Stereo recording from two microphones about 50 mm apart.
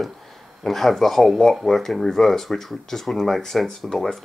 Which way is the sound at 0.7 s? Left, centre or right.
Centre.